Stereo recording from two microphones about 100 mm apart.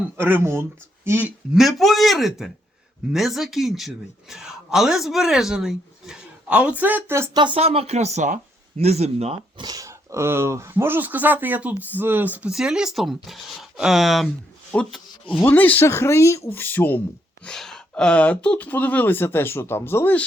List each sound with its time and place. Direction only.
0.2 s speech: 20° right (ahead or behind)
1.5 s speech: centre (ahead or behind); by 7.0 s 15° right (ahead or behind)
7.5 s speech: 80° right
9.6 s speech: 40° right (ahead or behind); by 12.5 s 15° right (ahead or behind)
12.5 s speech: 5° right (ahead or behind); by 17.0 s 20° left (ahead or behind)
17.4 s speech: 5° left (ahead or behind); by 20.2 s 20° left (ahead or behind)